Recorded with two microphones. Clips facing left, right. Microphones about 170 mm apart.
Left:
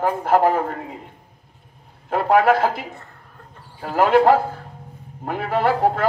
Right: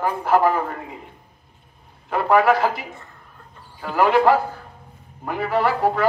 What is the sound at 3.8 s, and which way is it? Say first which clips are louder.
Speech: left 2 dB; 45° left (ahead or behind).